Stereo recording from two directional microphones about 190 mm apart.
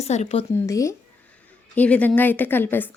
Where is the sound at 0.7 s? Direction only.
15° left (ahead or behind).